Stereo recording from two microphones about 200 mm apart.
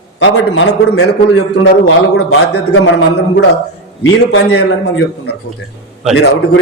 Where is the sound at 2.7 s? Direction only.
90° left.